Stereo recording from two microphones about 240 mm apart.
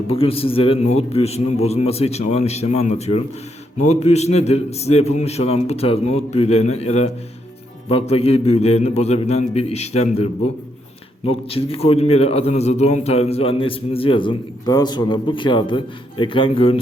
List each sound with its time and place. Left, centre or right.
0.1 s a man's voice: left
11.3 s a man's voice: left